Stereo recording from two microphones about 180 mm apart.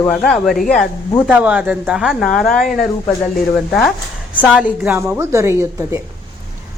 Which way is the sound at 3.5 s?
Centre (ahead or behind).